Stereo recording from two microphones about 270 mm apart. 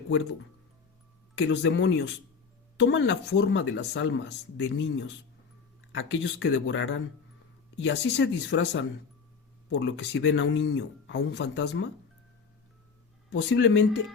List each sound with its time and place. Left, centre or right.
1.4 s speech: left
13.3 s speech: left